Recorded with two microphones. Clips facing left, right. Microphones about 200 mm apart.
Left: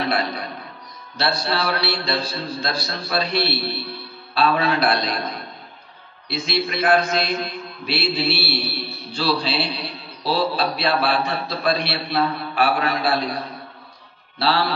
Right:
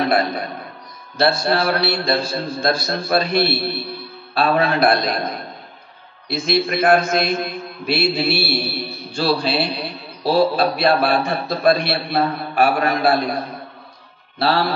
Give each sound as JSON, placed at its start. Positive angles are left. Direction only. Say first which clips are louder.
{"t": 0.0, "sound": "a man's voice", "louder": "right 5 dB", "side_deg": -50}
{"t": 6.2, "sound": "a man's voice", "louder": "right 5 dB", "side_deg": -50}
{"t": 14.4, "sound": "a man's voice", "louder": "right 2 dB", "side_deg": -50}